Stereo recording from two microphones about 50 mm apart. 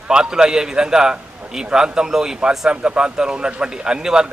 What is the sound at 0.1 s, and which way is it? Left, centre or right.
A man's voice, centre.